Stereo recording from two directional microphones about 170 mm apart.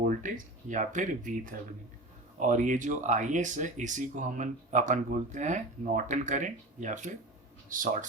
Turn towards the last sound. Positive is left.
turn(degrees=-50)  # may be behind; listen again after turning